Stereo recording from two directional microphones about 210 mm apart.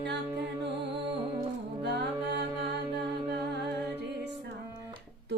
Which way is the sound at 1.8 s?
55° right (ahead or behind).